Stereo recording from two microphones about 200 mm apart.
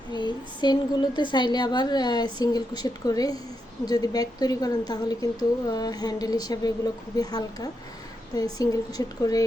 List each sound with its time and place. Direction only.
0.1 s speech: 20° left (ahead or behind)